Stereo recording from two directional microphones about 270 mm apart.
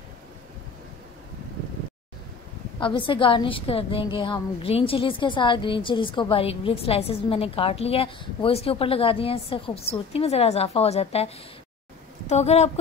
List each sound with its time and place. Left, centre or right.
2.8 s a woman's voice: centre